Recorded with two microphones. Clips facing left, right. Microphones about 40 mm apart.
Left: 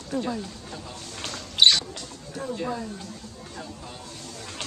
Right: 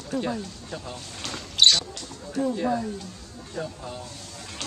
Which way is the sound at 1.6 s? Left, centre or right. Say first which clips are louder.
Left 1 dB; centre.